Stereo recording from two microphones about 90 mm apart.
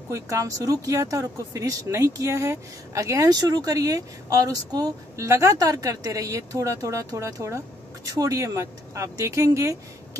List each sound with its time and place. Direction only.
0.1 s speech: 40° right (ahead or behind)